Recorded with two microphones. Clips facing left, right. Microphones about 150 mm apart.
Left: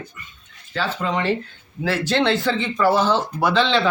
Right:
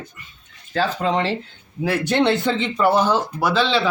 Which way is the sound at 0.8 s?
30° right (ahead or behind).